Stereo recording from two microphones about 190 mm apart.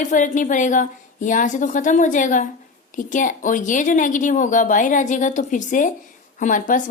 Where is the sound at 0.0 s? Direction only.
40° left (ahead or behind).